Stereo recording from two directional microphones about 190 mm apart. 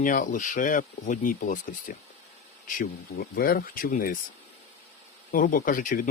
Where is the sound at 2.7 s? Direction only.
50° left (ahead or behind).